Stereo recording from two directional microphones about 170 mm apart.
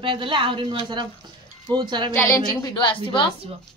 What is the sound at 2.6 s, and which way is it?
Speech, 30° left (ahead or behind).